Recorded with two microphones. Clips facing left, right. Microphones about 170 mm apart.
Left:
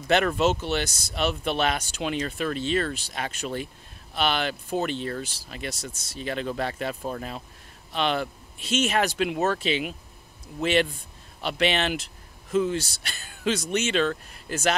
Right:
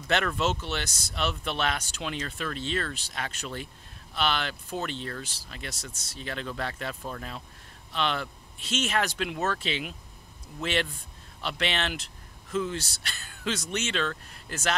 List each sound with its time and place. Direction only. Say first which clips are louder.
0.7 s speech: left 6 dB; 10° left (ahead or behind)
7.9 s speech: left 4 dB; 10° left (ahead or behind)